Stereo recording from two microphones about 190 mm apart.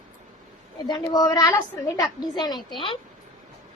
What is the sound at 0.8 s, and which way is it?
A woman's voice, 20° left (ahead or behind).